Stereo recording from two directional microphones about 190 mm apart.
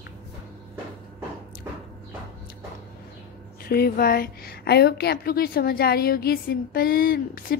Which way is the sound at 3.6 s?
50° left (ahead or behind).